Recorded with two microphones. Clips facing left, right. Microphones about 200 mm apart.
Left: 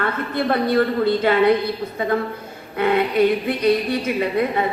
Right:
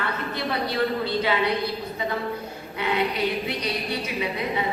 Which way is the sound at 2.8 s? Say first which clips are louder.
Left 8 dB; 50° left (ahead or behind).